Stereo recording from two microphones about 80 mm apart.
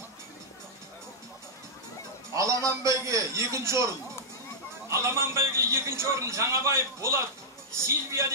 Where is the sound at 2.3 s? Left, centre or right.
Right.